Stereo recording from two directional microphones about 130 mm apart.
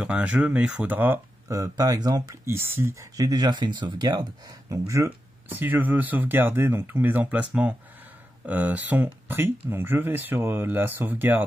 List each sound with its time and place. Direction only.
0.0 s speech: 10° right (ahead or behind)
1.6 s speech: 25° right (ahead or behind)